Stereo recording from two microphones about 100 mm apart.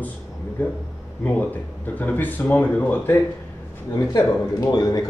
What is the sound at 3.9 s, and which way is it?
Speech, 35° left (ahead or behind).